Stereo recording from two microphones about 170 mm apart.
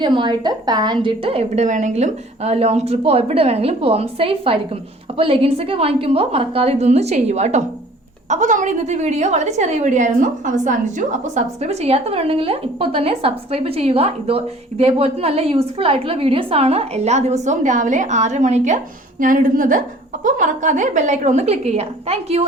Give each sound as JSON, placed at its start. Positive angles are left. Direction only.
{"t": 0.0, "sound": "a woman's voice", "side_deg": -30}